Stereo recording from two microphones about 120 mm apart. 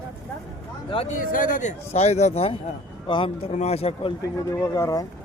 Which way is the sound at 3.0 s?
45° left (ahead or behind).